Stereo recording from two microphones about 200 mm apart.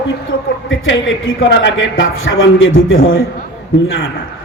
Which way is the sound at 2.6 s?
85° left.